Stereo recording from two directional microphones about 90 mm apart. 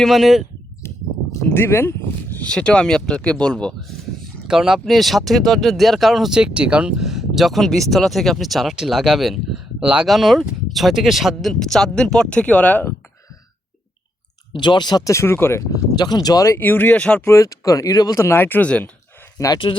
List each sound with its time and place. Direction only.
0.0 s speech: centre (ahead or behind)
1.5 s speech: 25° left (ahead or behind)
2.4 s speech: 10° left (ahead or behind)
4.4 s speech: 5° right (ahead or behind); by 12.9 s 15° left (ahead or behind)
14.5 s speech: 55° left (ahead or behind)
15.1 s speech: 30° left (ahead or behind)
15.7 s speech: 50° left (ahead or behind)
16.6 s speech: 20° left (ahead or behind)
17.2 s speech: 35° left (ahead or behind); by 18.9 s 15° left (ahead or behind)
19.4 s speech: 40° left (ahead or behind)